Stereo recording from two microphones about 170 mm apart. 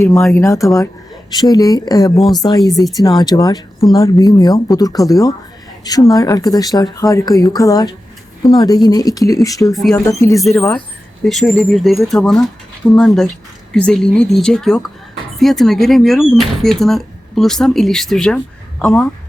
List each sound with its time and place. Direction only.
0.0 s speech: 15° left (ahead or behind)
11.3 s speech: centre (ahead or behind)